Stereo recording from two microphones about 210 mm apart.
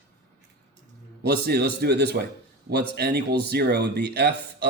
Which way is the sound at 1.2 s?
50° right (ahead or behind).